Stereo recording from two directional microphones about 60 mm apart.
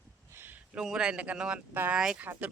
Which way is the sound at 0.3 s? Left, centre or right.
Right.